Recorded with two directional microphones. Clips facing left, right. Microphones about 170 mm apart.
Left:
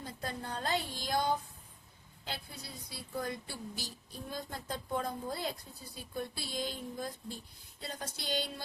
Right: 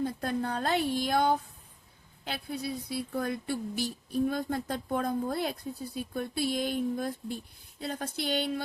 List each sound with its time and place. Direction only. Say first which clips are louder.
0.0 s speech: right 10 dB; 60° right (ahead or behind)